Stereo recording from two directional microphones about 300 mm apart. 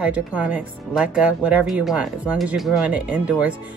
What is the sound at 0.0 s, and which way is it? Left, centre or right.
Speech, centre.